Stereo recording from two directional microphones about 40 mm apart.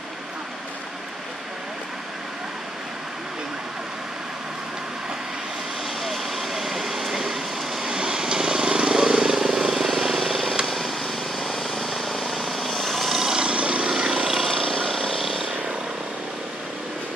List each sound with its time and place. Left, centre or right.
6.0 s vehicle: centre
7.9 s vehicle: centre
13.3 s vehicle: right
14.5 s vehicle: centre